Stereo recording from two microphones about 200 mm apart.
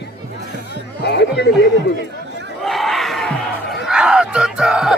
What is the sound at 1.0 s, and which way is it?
Speech, 55° left (ahead or behind).